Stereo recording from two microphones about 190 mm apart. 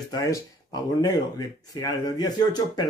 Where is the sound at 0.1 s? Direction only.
20° left (ahead or behind).